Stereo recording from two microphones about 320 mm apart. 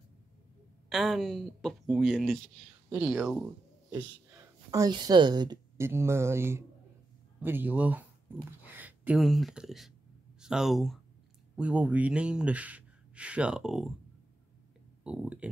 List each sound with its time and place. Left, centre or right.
0.8 s speech: centre
4.6 s speech: centre
15.0 s speech: centre